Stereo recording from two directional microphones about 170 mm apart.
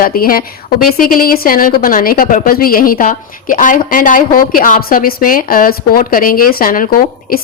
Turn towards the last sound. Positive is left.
turn(degrees=55)  # may be behind; listen again after turning